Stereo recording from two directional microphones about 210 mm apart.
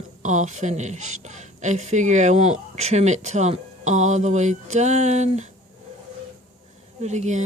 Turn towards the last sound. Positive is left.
turn(degrees=-35)  # may be behind; listen again after turning